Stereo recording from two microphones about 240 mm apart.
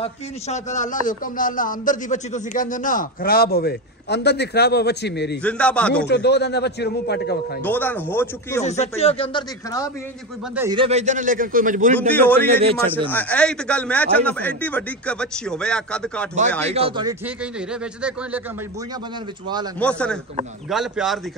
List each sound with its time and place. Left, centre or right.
0.0 s a man's voice: left
5.4 s a man's voice: centre
6.0 s a man's voice: left
7.6 s speech: centre
8.6 s speech: left
10.5 s speech: centre
10.8 s a man's voice: right
12.2 s a man's voice: centre
16.6 s speech: right
17.4 s a man's voice: centre
19.8 s a man's voice: centre